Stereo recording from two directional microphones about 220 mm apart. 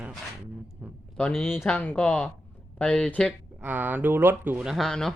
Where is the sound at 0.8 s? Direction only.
5° right (ahead or behind).